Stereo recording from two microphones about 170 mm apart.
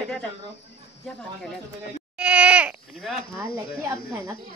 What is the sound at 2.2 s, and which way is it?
Goat, 5° right (ahead or behind).